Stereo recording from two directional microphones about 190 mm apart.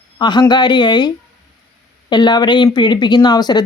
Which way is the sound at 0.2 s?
25° left (ahead or behind).